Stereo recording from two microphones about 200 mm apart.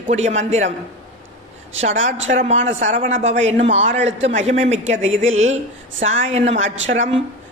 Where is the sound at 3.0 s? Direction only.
70° right (ahead or behind).